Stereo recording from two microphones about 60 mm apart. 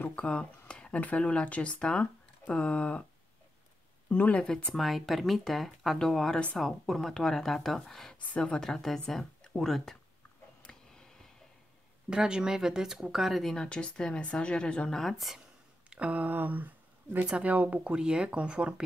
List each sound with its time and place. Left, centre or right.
0.1 s speech: centre
4.1 s speech: centre
4.8 s speech: centre
10.7 s a sound: centre
12.1 s speech: centre
15.0 s speech: centre
15.9 s speech: right
17.9 s speech: centre